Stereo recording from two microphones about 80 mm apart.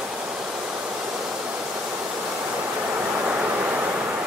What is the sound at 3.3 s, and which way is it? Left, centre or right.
Vehicle, centre.